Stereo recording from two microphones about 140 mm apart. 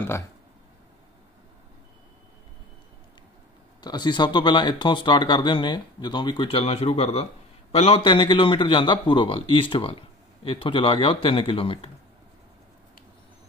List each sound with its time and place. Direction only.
3.8 s a man's voice: 30° left (ahead or behind); by 8.0 s 50° left (ahead or behind)
8.0 s speech: 35° left (ahead or behind)